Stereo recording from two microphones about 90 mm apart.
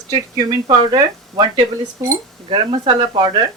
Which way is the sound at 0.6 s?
55° right (ahead or behind).